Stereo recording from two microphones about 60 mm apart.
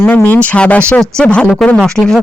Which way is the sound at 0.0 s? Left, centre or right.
Left.